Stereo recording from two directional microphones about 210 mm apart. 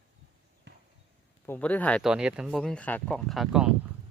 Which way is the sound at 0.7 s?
55° right (ahead or behind).